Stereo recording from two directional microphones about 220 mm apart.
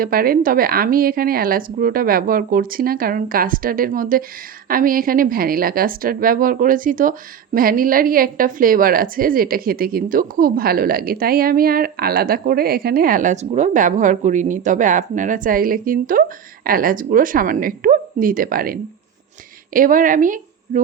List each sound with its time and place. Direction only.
0.0 s a woman's voice: 40° right (ahead or behind)